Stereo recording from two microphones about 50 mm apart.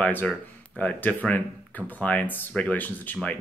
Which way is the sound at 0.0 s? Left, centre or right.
Left.